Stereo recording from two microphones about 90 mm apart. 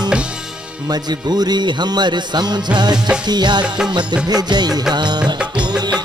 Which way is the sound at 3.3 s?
55° right (ahead or behind).